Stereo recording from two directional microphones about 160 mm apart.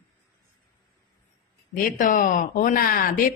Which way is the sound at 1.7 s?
55° left (ahead or behind).